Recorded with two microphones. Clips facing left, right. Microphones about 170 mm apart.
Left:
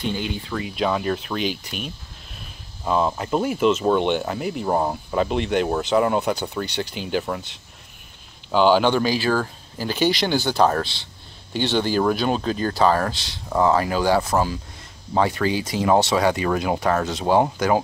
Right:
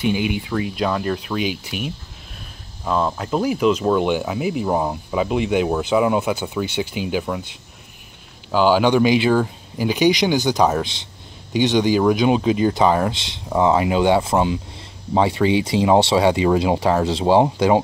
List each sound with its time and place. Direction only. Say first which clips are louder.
0.0 s speech: right 6 dB; 15° right (ahead or behind)
2.8 s speech: even; 5° left (ahead or behind)
8.5 s speech: right 1 dB; 5° right (ahead or behind); by 17.8 s 25° right (ahead or behind)